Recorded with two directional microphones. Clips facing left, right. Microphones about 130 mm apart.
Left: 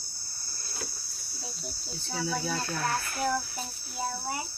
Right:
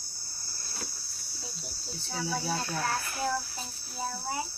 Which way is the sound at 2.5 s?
20° right (ahead or behind).